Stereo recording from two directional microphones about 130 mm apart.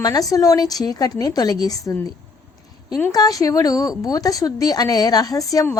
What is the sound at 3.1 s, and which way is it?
A woman's voice, 30° left (ahead or behind).